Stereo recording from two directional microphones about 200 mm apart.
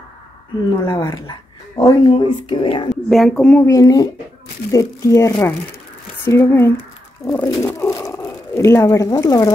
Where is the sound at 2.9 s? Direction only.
Centre (ahead or behind).